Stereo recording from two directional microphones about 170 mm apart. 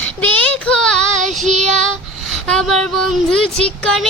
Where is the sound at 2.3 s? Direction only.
Centre (ahead or behind).